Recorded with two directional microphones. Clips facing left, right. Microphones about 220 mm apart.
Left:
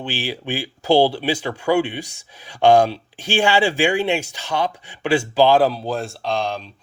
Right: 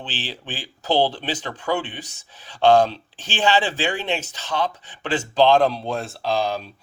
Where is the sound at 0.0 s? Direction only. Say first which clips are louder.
Left 7 dB; 10° left (ahead or behind).